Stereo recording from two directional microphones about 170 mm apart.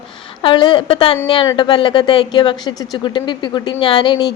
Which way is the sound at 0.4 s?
25° left (ahead or behind).